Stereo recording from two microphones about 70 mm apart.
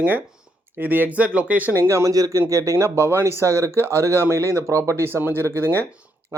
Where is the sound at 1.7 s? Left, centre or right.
Right.